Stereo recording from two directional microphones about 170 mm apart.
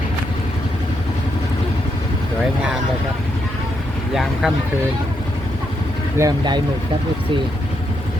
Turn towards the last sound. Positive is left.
turn(degrees=-25)  # may be behind; listen again after turning